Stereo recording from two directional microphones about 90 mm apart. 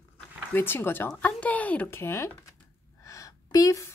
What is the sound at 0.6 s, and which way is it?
A woman's voice, 25° left (ahead or behind).